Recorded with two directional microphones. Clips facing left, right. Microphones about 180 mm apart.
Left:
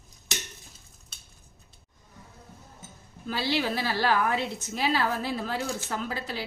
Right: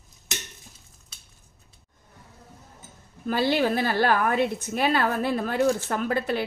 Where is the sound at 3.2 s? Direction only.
50° right (ahead or behind).